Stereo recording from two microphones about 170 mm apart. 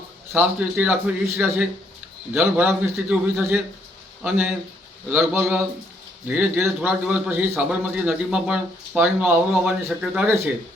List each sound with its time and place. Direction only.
0.3 s a man's voice: 10° right (ahead or behind)
5.0 s a man's voice: 5° right (ahead or behind)